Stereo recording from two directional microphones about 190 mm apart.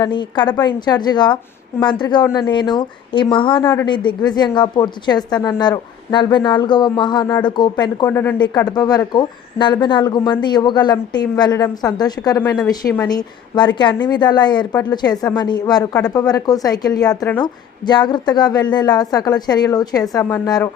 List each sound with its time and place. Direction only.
0.0 s a woman's voice: 25° left (ahead or behind)